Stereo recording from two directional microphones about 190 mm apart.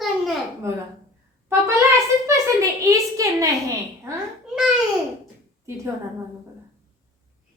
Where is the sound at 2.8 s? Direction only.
15° right (ahead or behind).